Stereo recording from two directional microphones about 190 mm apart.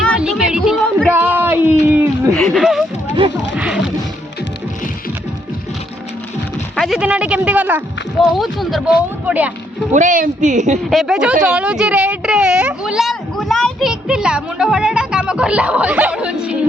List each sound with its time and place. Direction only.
0.2 s a sound: 5° right (ahead or behind)
2.3 s a sound: centre (ahead or behind)
3.6 s music: 5° right (ahead or behind)
6.7 s a woman's voice: centre (ahead or behind)
9.9 s speech: 40° right (ahead or behind)
10.8 s a woman's voice: centre (ahead or behind)